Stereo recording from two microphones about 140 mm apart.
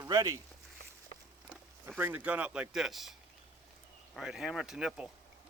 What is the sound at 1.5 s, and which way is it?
Speech, 10° right (ahead or behind).